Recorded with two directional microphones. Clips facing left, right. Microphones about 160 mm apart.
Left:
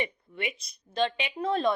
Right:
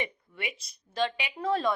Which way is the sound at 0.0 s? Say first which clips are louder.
Left 3 dB; 20° left (ahead or behind).